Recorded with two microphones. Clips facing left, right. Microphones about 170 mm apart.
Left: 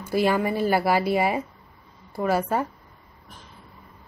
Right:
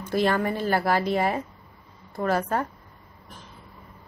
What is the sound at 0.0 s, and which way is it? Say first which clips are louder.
Speech: left 1 dB; 10° left (ahead or behind).